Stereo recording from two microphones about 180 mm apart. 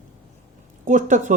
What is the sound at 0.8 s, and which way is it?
Speech, 45° right (ahead or behind).